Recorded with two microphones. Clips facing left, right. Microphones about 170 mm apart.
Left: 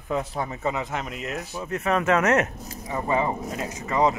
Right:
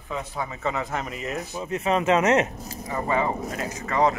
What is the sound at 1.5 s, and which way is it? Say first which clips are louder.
Speech: even; 20° right (ahead or behind).